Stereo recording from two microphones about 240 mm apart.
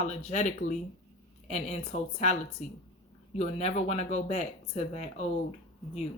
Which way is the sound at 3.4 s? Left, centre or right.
Left.